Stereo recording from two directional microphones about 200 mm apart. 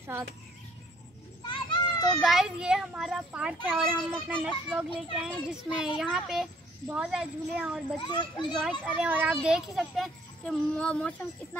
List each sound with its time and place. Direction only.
1.5 s children playing: 25° left (ahead or behind)
2.0 s a child's voice: centre (ahead or behind)
8.0 s a child's voice: 25° left (ahead or behind)
8.5 s a child's voice: centre (ahead or behind)